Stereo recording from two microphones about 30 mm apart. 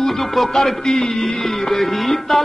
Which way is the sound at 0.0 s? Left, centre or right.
Centre.